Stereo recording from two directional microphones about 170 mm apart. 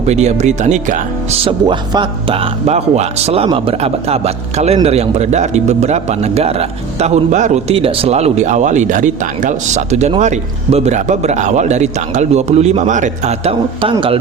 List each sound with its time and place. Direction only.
0.1 s speech: 40° right (ahead or behind)
1.5 s speech: 25° right (ahead or behind)